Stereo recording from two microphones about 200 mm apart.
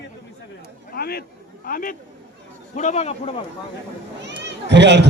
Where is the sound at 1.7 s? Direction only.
45° left (ahead or behind).